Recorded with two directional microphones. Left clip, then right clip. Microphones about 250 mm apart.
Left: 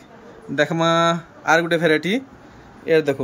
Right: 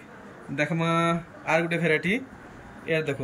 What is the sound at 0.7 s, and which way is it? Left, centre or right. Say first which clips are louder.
Speech: left 7 dB; left.